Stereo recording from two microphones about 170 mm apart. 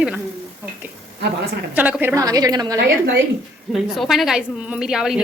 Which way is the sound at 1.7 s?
10° right (ahead or behind).